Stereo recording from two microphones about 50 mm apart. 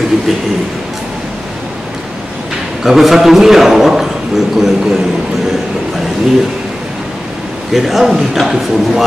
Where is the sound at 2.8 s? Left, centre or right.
Centre.